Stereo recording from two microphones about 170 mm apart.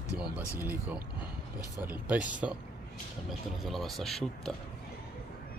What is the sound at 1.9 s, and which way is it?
Speech, 10° right (ahead or behind).